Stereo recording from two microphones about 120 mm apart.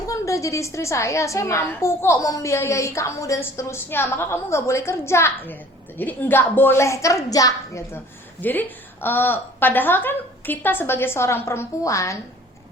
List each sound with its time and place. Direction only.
0.1 s a woman's voice: 25° left (ahead or behind)